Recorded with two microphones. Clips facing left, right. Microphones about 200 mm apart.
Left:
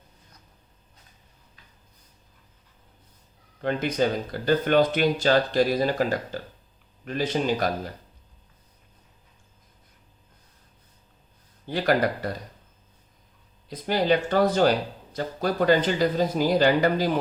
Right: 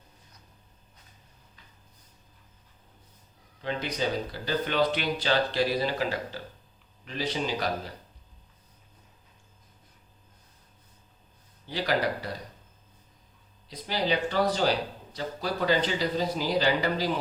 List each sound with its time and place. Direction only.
3.6 s speech: 50° left (ahead or behind)
11.6 s speech: 50° left (ahead or behind)
13.7 s speech: 50° left (ahead or behind)